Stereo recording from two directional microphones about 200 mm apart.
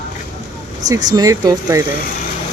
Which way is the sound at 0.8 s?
15° right (ahead or behind).